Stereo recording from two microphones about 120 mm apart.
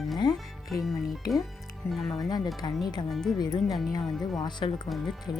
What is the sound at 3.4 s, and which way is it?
Speech, 30° left (ahead or behind).